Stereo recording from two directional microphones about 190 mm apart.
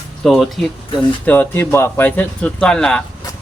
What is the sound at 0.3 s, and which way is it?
Speech, centre (ahead or behind).